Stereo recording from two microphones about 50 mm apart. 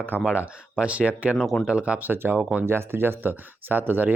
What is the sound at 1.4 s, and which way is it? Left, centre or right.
Speech, centre.